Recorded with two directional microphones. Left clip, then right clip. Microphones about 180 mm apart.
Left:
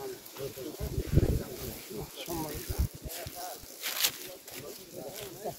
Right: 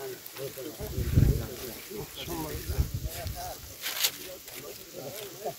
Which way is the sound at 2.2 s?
85° left.